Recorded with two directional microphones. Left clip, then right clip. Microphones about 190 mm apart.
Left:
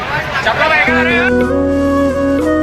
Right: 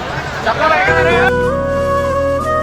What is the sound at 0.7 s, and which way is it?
Music, 45° right (ahead or behind).